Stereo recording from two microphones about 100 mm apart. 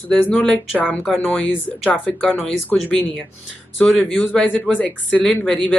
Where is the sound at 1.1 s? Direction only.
15° left (ahead or behind).